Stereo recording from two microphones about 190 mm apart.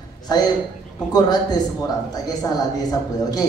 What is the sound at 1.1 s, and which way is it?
A woman's voice, 20° left (ahead or behind).